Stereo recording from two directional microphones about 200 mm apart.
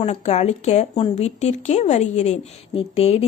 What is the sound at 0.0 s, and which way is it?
A woman's voice, 35° left (ahead or behind).